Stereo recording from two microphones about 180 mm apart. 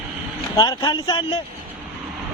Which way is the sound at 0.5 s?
20° left (ahead or behind).